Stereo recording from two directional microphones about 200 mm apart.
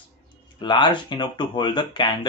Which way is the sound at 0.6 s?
25° left (ahead or behind).